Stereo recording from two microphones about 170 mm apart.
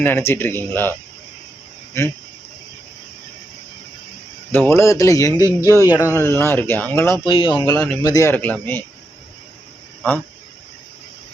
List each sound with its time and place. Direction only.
0.0 s speech: 15° left (ahead or behind)
4.5 s speech: 15° left (ahead or behind)
7.3 s speech: 30° left (ahead or behind); by 8.8 s 10° left (ahead or behind)